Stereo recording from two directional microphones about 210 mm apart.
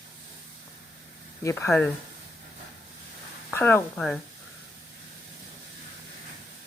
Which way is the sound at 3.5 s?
10° left (ahead or behind).